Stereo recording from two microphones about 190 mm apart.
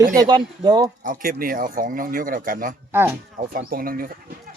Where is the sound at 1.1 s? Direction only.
50° right (ahead or behind).